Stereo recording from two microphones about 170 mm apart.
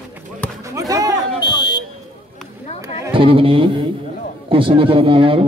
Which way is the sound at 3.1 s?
30° right (ahead or behind).